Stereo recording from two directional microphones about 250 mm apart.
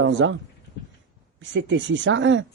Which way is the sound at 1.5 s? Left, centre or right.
Right.